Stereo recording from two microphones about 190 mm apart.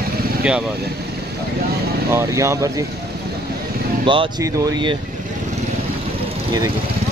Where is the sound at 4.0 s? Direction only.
25° right (ahead or behind).